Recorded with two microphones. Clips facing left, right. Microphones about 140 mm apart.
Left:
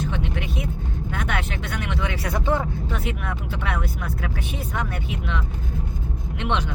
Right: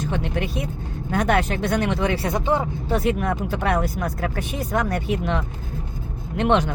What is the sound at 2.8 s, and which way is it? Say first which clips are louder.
Speech: right 7 dB; 35° right (ahead or behind).